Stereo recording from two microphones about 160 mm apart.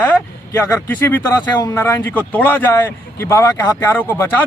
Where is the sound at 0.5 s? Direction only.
15° left (ahead or behind).